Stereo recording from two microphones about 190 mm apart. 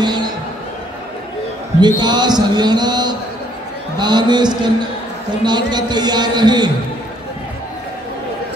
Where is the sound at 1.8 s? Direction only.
20° right (ahead or behind).